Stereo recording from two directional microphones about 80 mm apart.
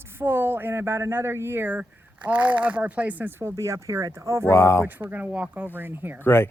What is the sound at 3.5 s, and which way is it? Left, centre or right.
Speech, right.